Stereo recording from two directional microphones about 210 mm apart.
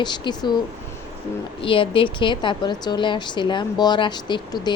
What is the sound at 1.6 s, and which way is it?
A woman's voice, 25° left (ahead or behind).